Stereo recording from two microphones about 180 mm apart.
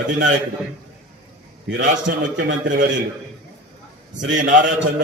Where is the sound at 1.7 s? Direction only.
75° right (ahead or behind).